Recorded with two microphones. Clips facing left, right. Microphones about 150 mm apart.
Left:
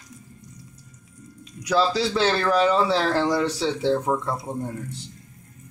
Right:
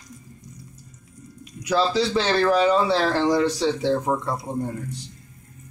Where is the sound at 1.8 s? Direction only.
5° left (ahead or behind).